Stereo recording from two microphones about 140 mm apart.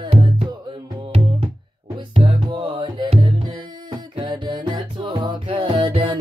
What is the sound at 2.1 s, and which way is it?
Music, 35° right (ahead or behind).